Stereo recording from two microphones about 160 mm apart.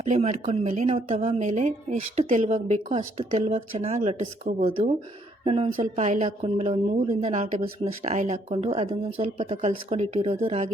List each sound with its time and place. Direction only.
0.0 s a woman's voice: 45° right (ahead or behind)
5.8 s a woman's voice: 50° right (ahead or behind); by 9.6 s 35° right (ahead or behind)
9.6 s a woman's voice: 45° right (ahead or behind)